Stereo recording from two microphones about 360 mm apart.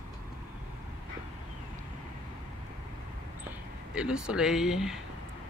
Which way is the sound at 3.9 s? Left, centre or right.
Centre.